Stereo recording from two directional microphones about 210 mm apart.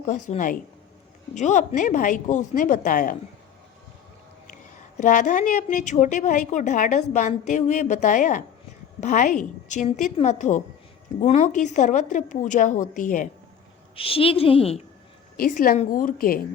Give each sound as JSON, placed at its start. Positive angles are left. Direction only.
{"t": 0.0, "sound": "speech", "side_deg": 35}
{"t": 4.4, "sound": "speech", "side_deg": 35}
{"t": 13.9, "sound": "a woman's voice", "side_deg": 25}
{"t": 15.4, "sound": "speech", "side_deg": 40}